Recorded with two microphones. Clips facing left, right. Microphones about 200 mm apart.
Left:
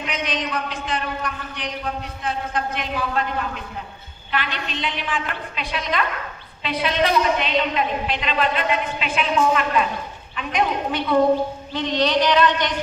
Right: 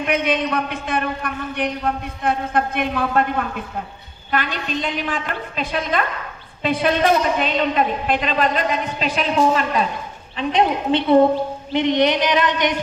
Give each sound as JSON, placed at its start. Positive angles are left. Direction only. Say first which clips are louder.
{"t": 0.0, "sound": "a man's voice", "louder": "right 7 dB", "side_deg": -55}